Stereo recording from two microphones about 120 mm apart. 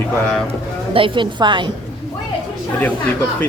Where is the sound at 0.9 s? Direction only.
45° right (ahead or behind).